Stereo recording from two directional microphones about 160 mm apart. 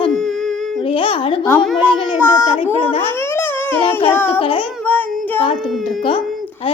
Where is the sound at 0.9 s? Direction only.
30° left (ahead or behind).